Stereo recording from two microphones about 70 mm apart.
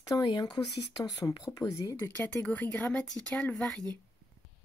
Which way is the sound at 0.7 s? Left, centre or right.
Left.